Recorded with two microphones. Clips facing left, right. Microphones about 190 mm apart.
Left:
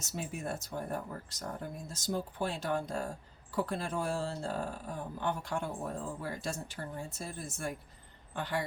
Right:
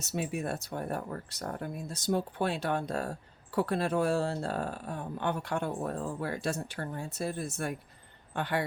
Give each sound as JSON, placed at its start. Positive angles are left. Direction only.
{"t": 0.0, "sound": "a woman's voice", "side_deg": -65}